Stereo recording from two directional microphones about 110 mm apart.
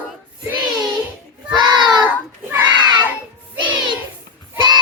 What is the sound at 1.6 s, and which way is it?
Child singing, 45° right (ahead or behind).